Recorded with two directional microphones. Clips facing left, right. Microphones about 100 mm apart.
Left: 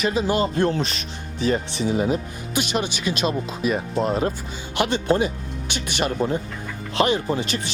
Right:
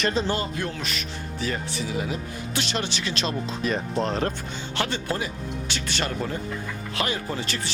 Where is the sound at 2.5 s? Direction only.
15° left (ahead or behind).